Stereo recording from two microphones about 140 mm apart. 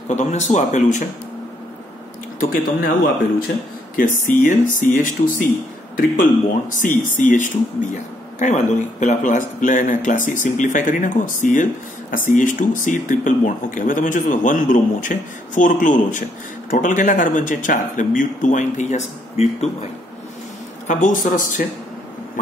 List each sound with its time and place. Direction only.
0.1 s speech: 55° left (ahead or behind)
2.5 s speech: 85° left
3.9 s speech: 75° left (ahead or behind)
5.9 s speech: 80° left
7.1 s speech: 65° left (ahead or behind)
20.8 s speech: 65° left (ahead or behind)